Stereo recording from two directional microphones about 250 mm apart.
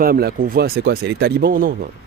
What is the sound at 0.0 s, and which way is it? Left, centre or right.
Speech, right.